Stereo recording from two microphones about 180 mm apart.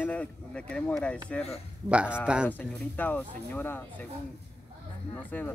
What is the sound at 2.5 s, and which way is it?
Speech, 10° left (ahead or behind).